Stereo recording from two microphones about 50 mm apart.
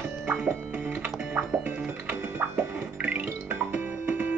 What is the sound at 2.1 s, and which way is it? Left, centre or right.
Music, right.